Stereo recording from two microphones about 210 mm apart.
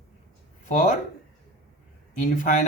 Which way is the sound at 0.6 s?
35° left (ahead or behind).